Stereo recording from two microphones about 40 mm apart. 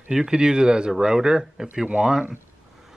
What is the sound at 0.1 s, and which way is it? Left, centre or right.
A man's voice, centre.